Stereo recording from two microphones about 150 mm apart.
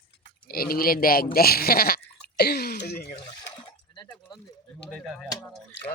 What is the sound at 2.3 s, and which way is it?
Throat clearing, 90° left.